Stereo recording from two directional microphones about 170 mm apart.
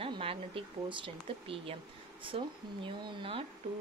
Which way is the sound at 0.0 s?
35° right (ahead or behind).